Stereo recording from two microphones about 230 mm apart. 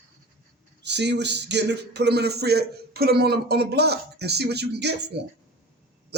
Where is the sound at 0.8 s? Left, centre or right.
Right.